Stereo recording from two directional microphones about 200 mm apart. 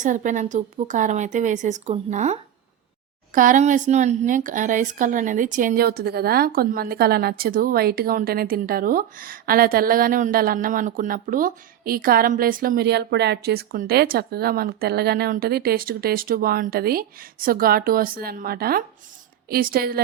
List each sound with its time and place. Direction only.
0.0 s speech: 40° right (ahead or behind)